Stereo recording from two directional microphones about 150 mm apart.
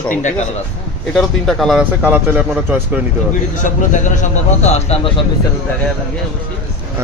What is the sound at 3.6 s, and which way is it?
A man's voice, 55° left (ahead or behind).